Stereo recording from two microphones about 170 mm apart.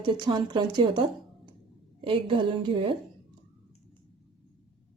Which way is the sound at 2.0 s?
30° right (ahead or behind).